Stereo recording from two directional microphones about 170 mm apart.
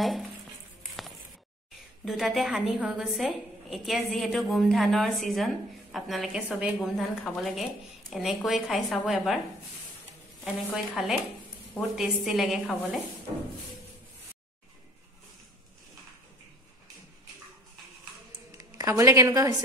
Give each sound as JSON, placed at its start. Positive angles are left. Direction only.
{"t": 0.0, "sound": "a woman's voice", "side_deg": 0}
{"t": 2.0, "sound": "a woman's voice", "side_deg": 0}
{"t": 10.4, "sound": "a woman's voice", "side_deg": -5}
{"t": 18.5, "sound": "a woman's voice", "side_deg": -20}